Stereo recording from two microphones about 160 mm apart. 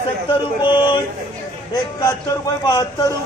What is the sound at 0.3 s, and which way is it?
Speech, 30° left (ahead or behind).